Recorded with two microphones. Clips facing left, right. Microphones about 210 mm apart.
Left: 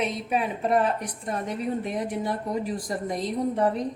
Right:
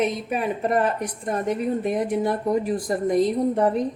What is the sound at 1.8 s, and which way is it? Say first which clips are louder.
A woman's voice: right 6 dB; 55° right (ahead or behind).